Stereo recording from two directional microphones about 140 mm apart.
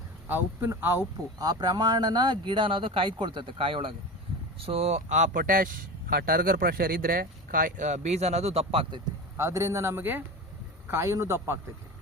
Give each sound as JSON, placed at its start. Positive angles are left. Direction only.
{"t": 0.3, "sound": "speech", "side_deg": -15}
{"t": 1.4, "sound": "speech", "side_deg": -30}
{"t": 9.4, "sound": "a man's voice", "side_deg": -20}